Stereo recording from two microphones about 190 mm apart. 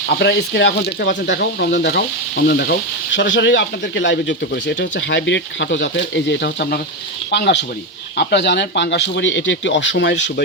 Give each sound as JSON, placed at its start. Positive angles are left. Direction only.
{"t": 0.1, "sound": "speech", "side_deg": 60}
{"t": 3.2, "sound": "speech", "side_deg": 70}